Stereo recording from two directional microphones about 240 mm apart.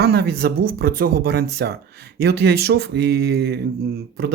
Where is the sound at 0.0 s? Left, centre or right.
Right.